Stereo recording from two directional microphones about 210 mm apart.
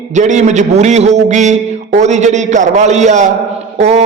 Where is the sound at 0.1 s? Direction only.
35° right (ahead or behind).